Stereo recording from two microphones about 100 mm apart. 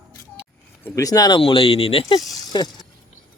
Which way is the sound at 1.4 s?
65° left (ahead or behind).